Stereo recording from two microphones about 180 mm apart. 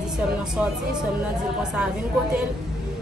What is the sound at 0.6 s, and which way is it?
Speech, 5° right (ahead or behind).